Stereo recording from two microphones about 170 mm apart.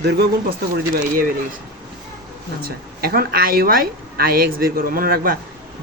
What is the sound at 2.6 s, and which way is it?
Speech, 60° right (ahead or behind).